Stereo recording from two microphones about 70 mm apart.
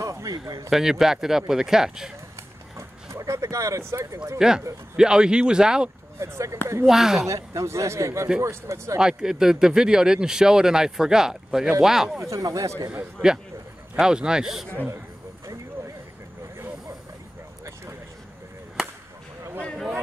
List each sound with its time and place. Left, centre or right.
0.0 s a sound: right
0.7 s speech: centre
3.1 s speech: right
4.4 s speech: centre
6.1 s speech: right
6.9 s speech: centre
7.2 s speech: right
8.9 s speech: centre
12.4 s speech: right
12.9 s speech: centre